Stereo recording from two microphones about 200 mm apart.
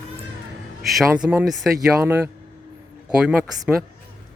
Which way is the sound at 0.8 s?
Centre (ahead or behind).